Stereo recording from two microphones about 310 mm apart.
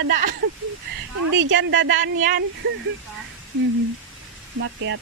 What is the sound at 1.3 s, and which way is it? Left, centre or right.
Speech, right.